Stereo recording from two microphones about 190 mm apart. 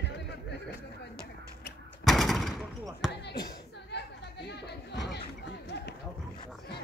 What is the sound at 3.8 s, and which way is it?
Chatter, 65° left (ahead or behind).